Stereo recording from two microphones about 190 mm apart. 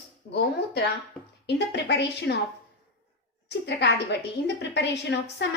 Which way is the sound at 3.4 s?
65° left (ahead or behind).